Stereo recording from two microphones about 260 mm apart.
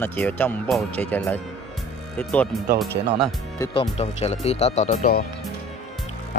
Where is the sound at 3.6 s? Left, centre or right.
Left.